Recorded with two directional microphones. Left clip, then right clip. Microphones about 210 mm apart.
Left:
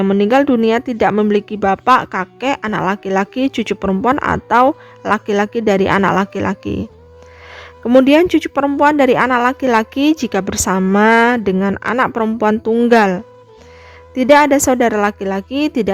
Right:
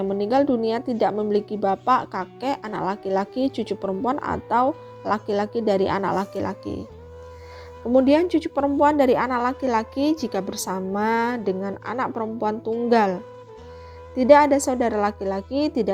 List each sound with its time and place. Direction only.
0.0 s a woman's voice: 50° left (ahead or behind)
7.9 s a woman's voice: 50° left (ahead or behind)